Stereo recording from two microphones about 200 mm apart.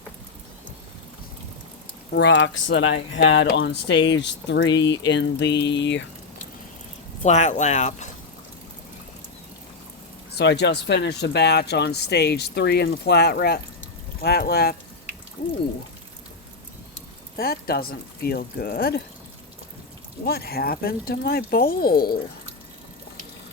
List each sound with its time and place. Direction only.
2.1 s speech: 65° left (ahead or behind)
7.2 s speech: 35° left (ahead or behind)
10.3 s speech: 55° left (ahead or behind)
17.3 s speech: 50° left (ahead or behind)
20.2 s speech: 50° left (ahead or behind)